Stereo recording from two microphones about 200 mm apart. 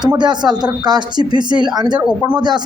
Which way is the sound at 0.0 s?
20° right (ahead or behind).